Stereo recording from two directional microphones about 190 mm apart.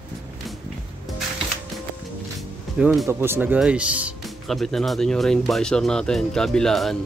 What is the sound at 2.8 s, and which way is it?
Speech, 5° right (ahead or behind).